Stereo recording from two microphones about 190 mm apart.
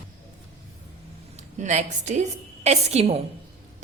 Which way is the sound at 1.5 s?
40° right (ahead or behind).